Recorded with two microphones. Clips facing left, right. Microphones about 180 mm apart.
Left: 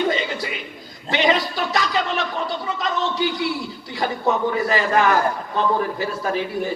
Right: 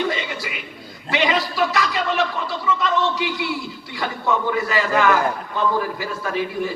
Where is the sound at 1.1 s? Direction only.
35° left (ahead or behind).